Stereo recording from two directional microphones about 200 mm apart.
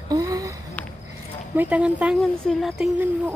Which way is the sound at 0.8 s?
10° left (ahead or behind).